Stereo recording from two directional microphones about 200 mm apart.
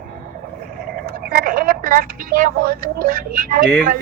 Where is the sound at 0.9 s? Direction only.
50° right (ahead or behind).